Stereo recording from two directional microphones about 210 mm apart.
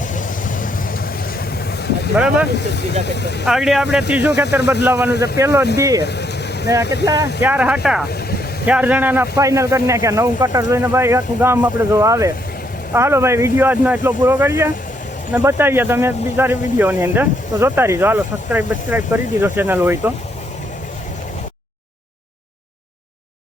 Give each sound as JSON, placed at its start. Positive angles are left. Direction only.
{"t": 0.1, "sound": "vehicle", "side_deg": 40}
{"t": 2.1, "sound": "speech", "side_deg": -5}
{"t": 2.6, "sound": "speech", "side_deg": 55}
{"t": 3.4, "sound": "speech", "side_deg": 0}
{"t": 6.0, "sound": "vehicle", "side_deg": 55}
{"t": 6.8, "sound": "speech", "side_deg": 55}
{"t": 7.4, "sound": "speech", "side_deg": -5}